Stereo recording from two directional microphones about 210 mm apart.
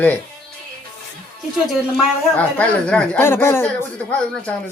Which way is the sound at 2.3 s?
5° left (ahead or behind).